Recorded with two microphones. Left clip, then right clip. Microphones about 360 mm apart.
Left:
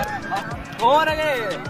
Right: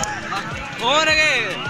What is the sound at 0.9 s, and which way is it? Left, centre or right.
Speech, left.